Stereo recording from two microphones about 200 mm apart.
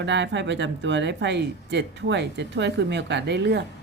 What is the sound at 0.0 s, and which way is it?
Speech, 60° right (ahead or behind).